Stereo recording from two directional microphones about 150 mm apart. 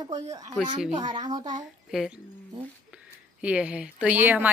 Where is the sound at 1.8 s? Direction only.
5° right (ahead or behind).